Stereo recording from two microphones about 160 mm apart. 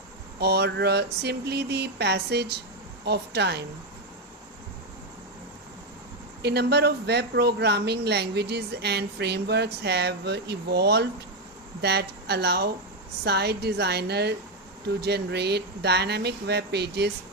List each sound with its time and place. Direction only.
0.3 s a woman's voice: 90° right
6.4 s a woman's voice: 90° right